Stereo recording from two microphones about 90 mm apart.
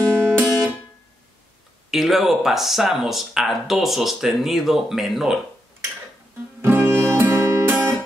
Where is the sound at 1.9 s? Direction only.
Centre (ahead or behind).